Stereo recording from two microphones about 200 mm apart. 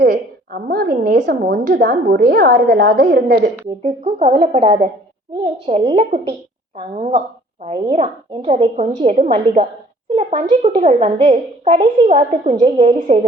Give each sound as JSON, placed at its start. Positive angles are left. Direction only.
{"t": 0.0, "sound": "a woman's voice", "side_deg": -50}
{"t": 3.8, "sound": "a woman's voice", "side_deg": -30}